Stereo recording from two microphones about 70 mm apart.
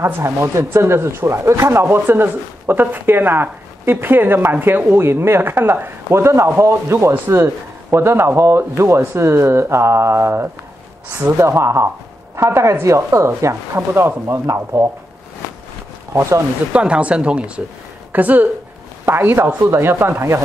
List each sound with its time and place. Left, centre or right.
0.0 s speech: right
16.1 s speech: right
16.7 s speech: centre
18.1 s a woman's voice: right